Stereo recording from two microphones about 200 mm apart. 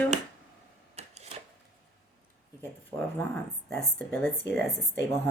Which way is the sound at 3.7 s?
10° left (ahead or behind).